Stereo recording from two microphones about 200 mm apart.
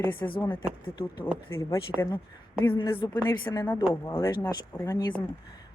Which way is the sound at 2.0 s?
10° left (ahead or behind).